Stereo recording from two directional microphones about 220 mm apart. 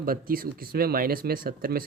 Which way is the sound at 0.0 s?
40° right (ahead or behind).